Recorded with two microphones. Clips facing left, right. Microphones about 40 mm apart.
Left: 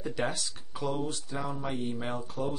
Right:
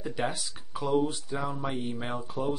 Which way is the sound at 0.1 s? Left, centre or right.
Centre.